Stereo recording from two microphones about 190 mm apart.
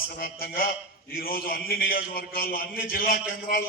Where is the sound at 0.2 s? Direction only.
50° left (ahead or behind).